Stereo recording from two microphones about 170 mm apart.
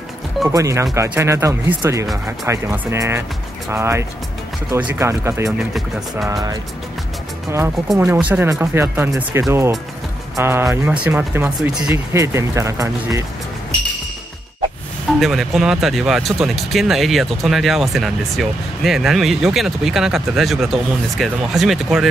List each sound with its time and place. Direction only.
0.5 s speech: 20° right (ahead or behind)
5.8 s speech: centre (ahead or behind)
7.9 s speech: 5° right (ahead or behind)
15.1 s speech: centre (ahead or behind)